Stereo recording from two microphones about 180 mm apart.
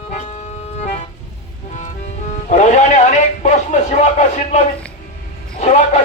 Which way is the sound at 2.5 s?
40° left (ahead or behind).